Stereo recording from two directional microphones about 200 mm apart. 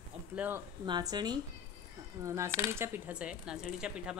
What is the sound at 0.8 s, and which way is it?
A woman's voice, 20° right (ahead or behind).